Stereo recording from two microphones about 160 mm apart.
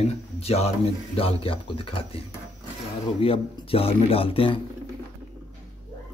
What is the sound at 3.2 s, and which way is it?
Speech, 35° left (ahead or behind).